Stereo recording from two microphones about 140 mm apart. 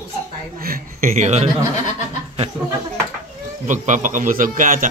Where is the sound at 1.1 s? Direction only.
55° right (ahead or behind).